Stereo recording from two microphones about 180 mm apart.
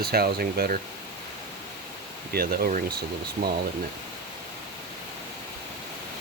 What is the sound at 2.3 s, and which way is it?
Speech, 55° right (ahead or behind).